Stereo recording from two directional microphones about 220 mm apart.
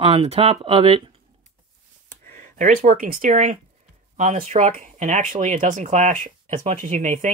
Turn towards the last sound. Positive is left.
turn(degrees=-35)  # may be behind; listen again after turning